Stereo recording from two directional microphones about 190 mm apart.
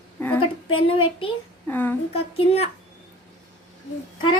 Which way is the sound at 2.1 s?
30° left (ahead or behind).